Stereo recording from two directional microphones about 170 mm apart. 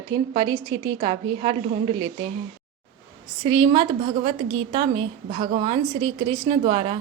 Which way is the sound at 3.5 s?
30° right (ahead or behind).